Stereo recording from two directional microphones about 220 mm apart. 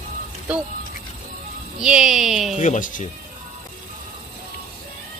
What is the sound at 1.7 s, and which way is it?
Speech, 5° right (ahead or behind).